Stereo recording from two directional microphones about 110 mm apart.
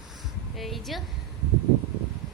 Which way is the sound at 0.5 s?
Centre (ahead or behind).